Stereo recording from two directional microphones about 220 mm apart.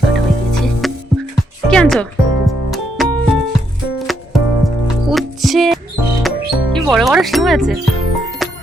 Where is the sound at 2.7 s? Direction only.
Centre (ahead or behind).